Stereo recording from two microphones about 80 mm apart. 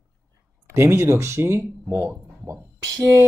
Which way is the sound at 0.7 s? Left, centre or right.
Right.